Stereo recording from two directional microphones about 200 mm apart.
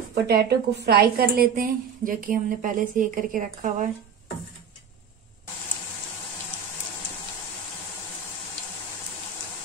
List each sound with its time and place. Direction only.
0.1 s a woman's voice: 55° right (ahead or behind); by 3.9 s 40° right (ahead or behind)